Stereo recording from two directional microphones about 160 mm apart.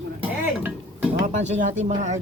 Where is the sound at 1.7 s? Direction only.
45° right (ahead or behind).